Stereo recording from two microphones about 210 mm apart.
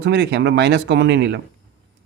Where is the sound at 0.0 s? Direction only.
55° right (ahead or behind).